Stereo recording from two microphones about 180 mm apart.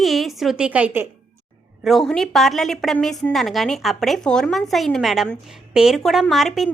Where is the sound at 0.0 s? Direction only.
Centre (ahead or behind).